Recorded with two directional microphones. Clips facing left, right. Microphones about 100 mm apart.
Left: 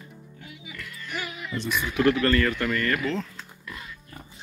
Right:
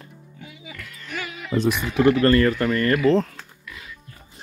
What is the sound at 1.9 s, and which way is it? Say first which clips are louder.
Speech: right 4 dB; 35° right (ahead or behind).